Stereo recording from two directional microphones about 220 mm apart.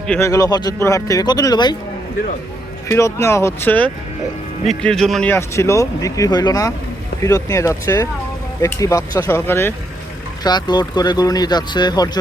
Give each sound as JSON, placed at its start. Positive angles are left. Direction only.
{"t": 0.1, "sound": "speech", "side_deg": 15}
{"t": 2.9, "sound": "speech", "side_deg": 10}